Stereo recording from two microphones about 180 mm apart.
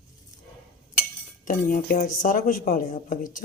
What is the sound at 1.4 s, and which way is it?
Speech, 50° left (ahead or behind).